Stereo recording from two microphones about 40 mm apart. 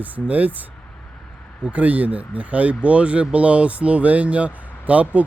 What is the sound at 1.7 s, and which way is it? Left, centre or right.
Speech, right.